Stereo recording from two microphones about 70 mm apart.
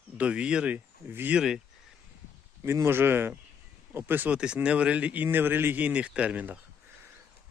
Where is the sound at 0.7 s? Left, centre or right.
Right.